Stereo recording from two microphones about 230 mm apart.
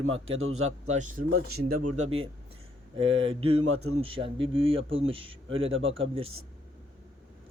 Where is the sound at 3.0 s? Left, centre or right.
Right.